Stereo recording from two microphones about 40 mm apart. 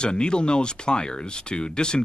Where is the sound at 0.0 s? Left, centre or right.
Left.